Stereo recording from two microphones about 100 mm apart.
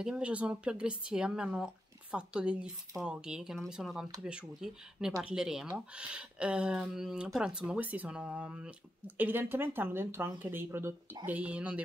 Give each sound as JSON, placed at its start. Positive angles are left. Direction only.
{"t": 0.0, "sound": "speech", "side_deg": -10}